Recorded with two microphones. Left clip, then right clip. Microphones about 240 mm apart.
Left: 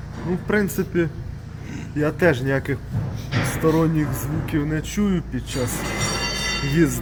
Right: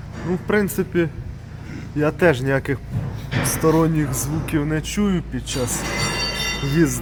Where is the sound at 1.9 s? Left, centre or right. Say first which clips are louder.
Right 2 dB; centre.